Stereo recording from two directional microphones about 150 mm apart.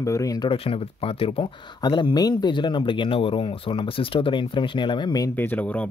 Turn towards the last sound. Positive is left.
turn(degrees=10)  # may be behind; listen again after turning